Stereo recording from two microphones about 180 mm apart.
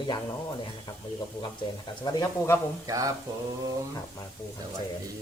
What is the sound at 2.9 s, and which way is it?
Mantra, 20° right (ahead or behind).